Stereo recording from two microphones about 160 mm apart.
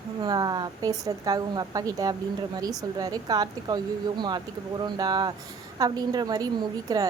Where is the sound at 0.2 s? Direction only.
25° right (ahead or behind).